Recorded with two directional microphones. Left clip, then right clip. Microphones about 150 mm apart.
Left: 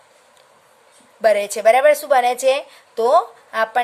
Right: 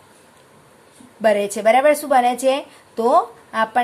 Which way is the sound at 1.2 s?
45° left (ahead or behind).